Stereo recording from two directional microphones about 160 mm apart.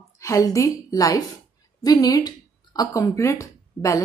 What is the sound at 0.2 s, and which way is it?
A woman's voice, 20° left (ahead or behind).